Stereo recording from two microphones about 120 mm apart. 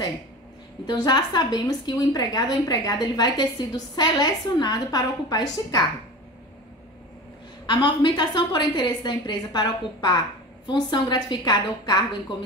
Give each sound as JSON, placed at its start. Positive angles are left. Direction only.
{"t": 0.8, "sound": "a woman's voice", "side_deg": 35}
{"t": 7.6, "sound": "a woman's voice", "side_deg": 40}